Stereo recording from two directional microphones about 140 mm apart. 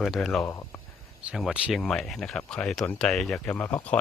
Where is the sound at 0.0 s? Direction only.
Centre (ahead or behind).